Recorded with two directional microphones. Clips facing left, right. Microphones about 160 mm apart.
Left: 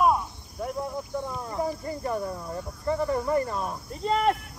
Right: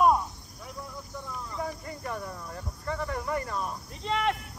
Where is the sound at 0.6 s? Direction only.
55° left (ahead or behind).